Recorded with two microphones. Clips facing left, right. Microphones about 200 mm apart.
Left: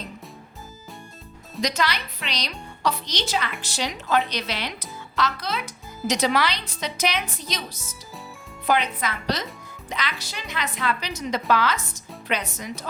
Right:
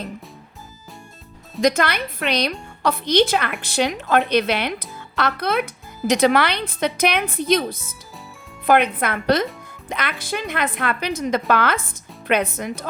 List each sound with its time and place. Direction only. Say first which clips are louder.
1.6 s a woman's voice: right 7 dB; 55° right (ahead or behind)